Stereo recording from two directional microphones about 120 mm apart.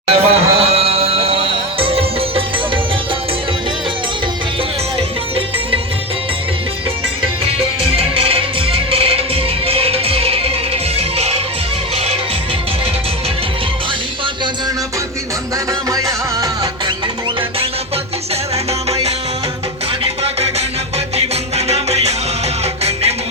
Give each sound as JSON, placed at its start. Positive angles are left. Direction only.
{"t": 0.1, "sound": "music", "side_deg": -60}
{"t": 7.4, "sound": "music", "side_deg": -50}
{"t": 15.9, "sound": "music", "side_deg": -30}
{"t": 20.2, "sound": "music", "side_deg": -60}